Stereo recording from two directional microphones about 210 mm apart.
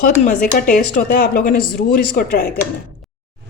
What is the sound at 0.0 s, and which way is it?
Speech, 35° left (ahead or behind).